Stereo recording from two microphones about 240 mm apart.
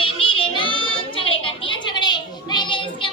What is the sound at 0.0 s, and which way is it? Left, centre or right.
Child singing, left.